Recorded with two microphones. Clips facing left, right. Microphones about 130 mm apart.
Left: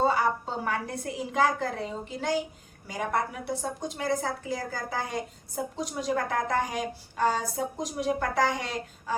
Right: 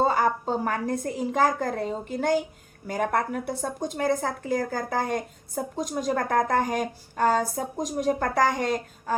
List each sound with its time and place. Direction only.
0.1 s a woman's voice: 45° right (ahead or behind)